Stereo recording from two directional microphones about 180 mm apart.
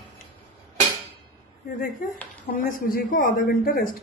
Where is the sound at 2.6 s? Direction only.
50° left (ahead or behind).